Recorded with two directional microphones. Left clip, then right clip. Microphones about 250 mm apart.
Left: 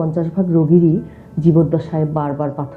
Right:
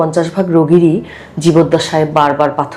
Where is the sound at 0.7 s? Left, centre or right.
Right.